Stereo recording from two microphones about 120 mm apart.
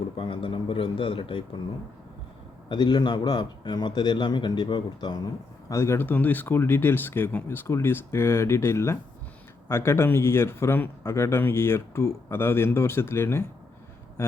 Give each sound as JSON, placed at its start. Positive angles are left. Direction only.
{"t": 0.2, "sound": "a man's voice", "side_deg": 45}
{"t": 2.6, "sound": "a man's voice", "side_deg": 40}
{"t": 5.6, "sound": "a man's voice", "side_deg": 25}